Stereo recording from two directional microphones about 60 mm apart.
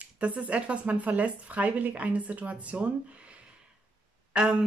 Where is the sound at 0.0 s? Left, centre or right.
Right.